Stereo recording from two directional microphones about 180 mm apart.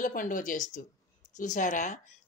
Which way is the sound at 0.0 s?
50° left (ahead or behind).